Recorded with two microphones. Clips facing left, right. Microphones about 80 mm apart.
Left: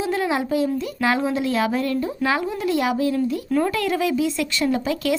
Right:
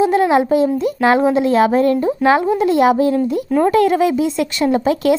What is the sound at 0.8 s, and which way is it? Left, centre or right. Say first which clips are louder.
Speech: right 8 dB; right.